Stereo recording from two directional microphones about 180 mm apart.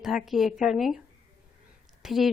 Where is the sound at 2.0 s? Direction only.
Centre (ahead or behind).